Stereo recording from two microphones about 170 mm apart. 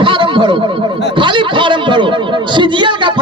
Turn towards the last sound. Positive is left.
turn(degrees=-30)  # may be behind; listen again after turning